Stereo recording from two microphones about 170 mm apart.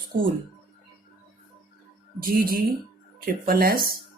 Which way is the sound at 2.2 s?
60° right (ahead or behind).